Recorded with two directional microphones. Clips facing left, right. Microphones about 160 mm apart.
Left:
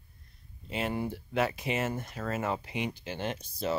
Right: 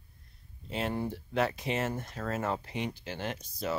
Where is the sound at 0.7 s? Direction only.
5° left (ahead or behind); by 3.8 s 25° left (ahead or behind).